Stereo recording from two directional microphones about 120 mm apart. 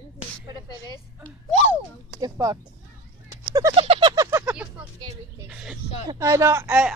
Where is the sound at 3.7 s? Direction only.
45° right (ahead or behind).